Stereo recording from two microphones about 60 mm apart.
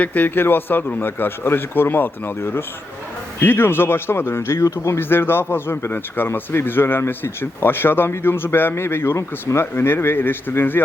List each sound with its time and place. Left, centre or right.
0.0 s speech: left